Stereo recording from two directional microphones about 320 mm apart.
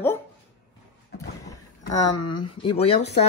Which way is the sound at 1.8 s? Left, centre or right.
Centre.